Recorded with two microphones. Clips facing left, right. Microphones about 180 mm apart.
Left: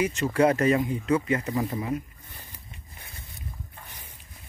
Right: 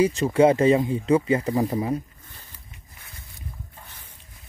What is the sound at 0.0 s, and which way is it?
Speech, 30° right (ahead or behind).